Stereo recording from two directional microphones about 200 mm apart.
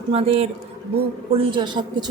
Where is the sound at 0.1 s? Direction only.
30° right (ahead or behind).